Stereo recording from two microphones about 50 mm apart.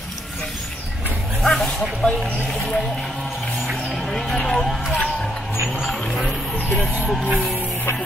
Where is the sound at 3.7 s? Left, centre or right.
Centre.